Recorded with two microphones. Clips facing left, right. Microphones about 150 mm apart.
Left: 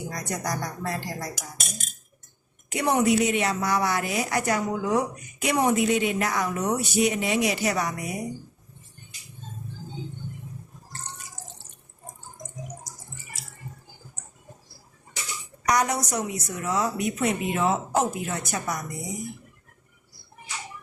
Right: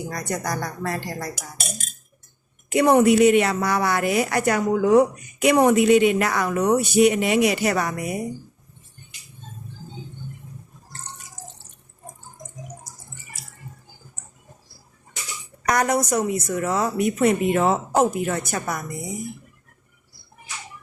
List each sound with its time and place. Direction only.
0.1 s a woman's voice: 60° right (ahead or behind)
2.6 s a woman's voice: 55° right (ahead or behind)
15.7 s a woman's voice: 55° right (ahead or behind)